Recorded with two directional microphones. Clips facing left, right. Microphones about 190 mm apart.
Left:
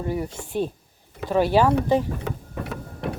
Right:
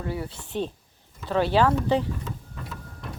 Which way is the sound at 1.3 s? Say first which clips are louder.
Left 3 dB; 10° left (ahead or behind).